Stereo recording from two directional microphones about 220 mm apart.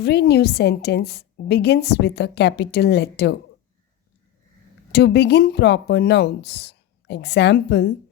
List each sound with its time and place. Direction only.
0.0 s a woman's voice: 45° left (ahead or behind)
4.9 s a woman's voice: 50° left (ahead or behind)